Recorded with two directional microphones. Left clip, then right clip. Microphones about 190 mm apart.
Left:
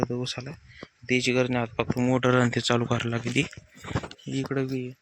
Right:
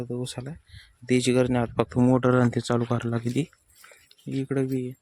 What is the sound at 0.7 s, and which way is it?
Speech, 35° right (ahead or behind).